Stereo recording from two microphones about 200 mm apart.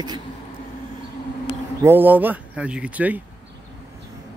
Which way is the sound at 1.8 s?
10° right (ahead or behind).